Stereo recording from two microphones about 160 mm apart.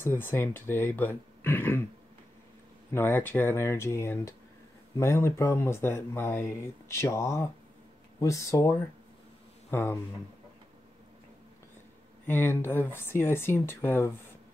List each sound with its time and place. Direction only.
0.0 s speech: 15° left (ahead or behind)
2.9 s speech: 15° left (ahead or behind)
12.3 s speech: 15° left (ahead or behind)